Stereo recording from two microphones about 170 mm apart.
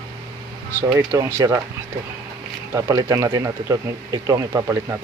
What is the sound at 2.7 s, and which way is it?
Speech, 20° right (ahead or behind).